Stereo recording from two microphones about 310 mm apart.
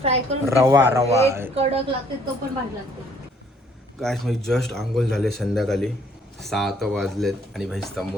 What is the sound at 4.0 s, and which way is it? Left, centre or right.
Speech, centre.